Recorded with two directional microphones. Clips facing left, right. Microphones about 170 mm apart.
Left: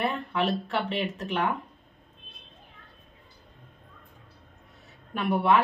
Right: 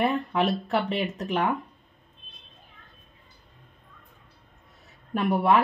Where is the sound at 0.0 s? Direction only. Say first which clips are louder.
Right 3 dB; 40° right (ahead or behind).